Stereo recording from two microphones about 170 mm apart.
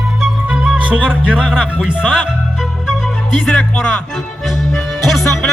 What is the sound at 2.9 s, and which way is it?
Music, centre (ahead or behind).